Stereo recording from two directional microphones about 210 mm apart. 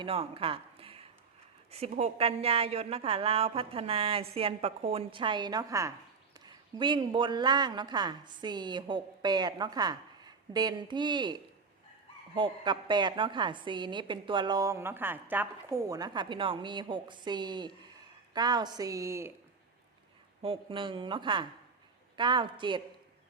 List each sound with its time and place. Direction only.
0.0 s a woman's voice: 25° right (ahead or behind)
20.4 s a woman's voice: 25° right (ahead or behind)